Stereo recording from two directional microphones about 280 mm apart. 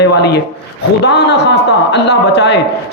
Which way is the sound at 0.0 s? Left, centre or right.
Left.